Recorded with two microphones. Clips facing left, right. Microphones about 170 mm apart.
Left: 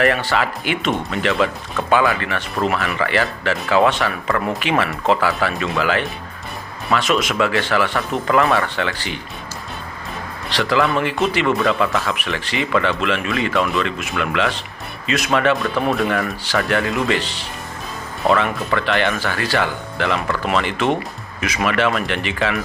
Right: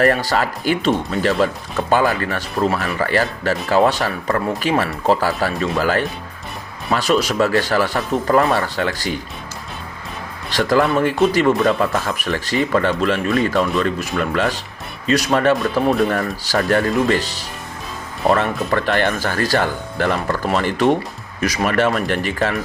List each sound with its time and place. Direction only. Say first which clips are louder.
0.0 s speech: right 2 dB; 40° right (ahead or behind)
10.5 s speech: right 2 dB; 45° right (ahead or behind)
18.4 s speech: right 1 dB; 40° right (ahead or behind)